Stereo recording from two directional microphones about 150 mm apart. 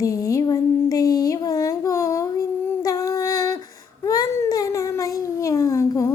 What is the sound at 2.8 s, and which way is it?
Humming, 25° left (ahead or behind).